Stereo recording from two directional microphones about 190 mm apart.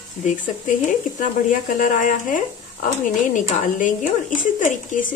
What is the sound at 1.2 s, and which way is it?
Speech, 45° left (ahead or behind).